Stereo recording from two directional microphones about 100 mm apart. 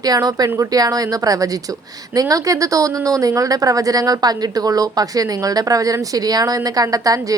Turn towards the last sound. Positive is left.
turn(degrees=-35)  # may be behind; listen again after turning